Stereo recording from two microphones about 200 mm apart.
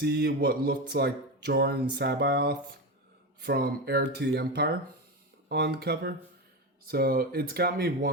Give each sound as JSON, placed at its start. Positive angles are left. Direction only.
{"t": 0.0, "sound": "speech", "side_deg": -55}